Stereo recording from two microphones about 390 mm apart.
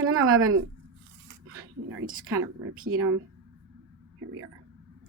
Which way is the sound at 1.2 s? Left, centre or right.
Right.